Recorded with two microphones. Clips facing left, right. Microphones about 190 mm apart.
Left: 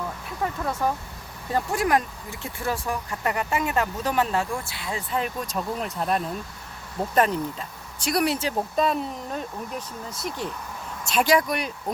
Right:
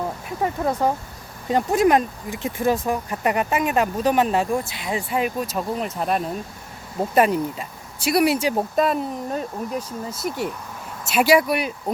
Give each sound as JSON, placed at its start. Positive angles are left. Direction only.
{"t": 0.0, "sound": "speech", "side_deg": -25}